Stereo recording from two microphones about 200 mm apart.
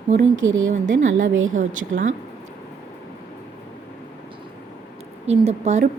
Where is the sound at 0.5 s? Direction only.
75° right (ahead or behind).